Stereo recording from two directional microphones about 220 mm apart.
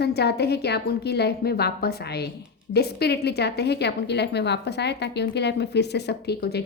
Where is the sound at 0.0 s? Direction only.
50° left (ahead or behind).